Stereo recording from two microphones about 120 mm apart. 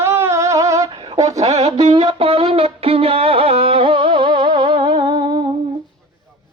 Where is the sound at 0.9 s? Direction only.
35° right (ahead or behind).